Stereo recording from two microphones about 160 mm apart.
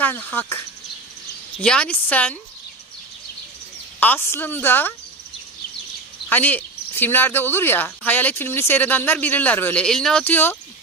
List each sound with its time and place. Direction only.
0.0 s speech: 10° left (ahead or behind)
1.6 s speech: 5° left (ahead or behind)
4.0 s speech: 10° left (ahead or behind)
6.2 s speech: 10° left (ahead or behind)